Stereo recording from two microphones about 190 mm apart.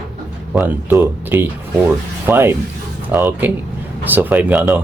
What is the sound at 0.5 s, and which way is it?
Speech, 10° right (ahead or behind).